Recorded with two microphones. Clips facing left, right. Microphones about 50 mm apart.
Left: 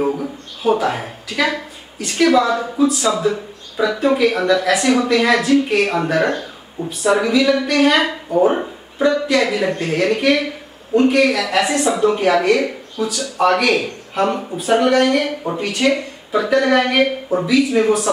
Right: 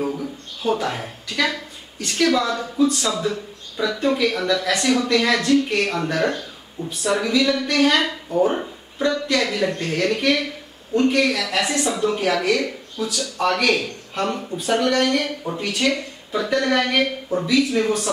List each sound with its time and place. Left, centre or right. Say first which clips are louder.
0.0 s speech: left 5 dB; centre
0.6 s speech: left 5 dB; centre